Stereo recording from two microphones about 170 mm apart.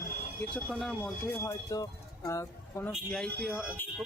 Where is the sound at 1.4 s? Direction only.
20° left (ahead or behind).